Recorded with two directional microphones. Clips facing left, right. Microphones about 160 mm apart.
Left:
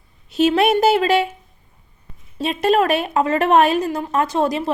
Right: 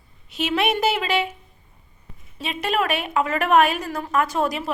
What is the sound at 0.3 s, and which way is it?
A woman's voice, 40° left (ahead or behind).